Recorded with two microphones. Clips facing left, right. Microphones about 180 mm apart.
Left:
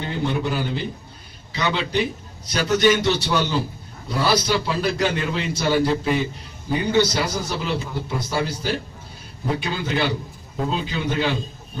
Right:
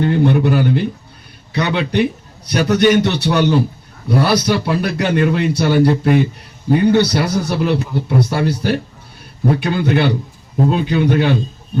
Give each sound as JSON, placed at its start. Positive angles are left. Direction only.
{"t": 0.0, "sound": "a man's voice", "side_deg": -60}